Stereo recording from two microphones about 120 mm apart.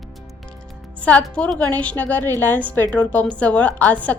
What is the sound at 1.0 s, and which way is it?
A woman's voice, 10° left (ahead or behind).